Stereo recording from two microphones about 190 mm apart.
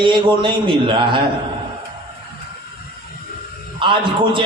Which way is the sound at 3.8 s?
25° right (ahead or behind).